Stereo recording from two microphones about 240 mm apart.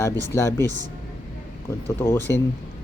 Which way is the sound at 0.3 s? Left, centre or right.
Centre.